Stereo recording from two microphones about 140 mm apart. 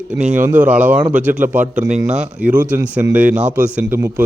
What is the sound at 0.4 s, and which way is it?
A man's voice, 10° right (ahead or behind).